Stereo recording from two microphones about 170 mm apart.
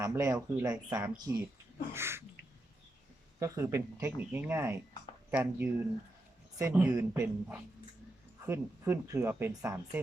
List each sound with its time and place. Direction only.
0.0 s speech: 20° right (ahead or behind)
3.3 s speech: 20° right (ahead or behind)